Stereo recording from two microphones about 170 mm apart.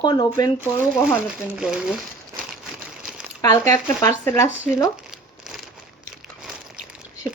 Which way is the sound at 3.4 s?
20° left (ahead or behind).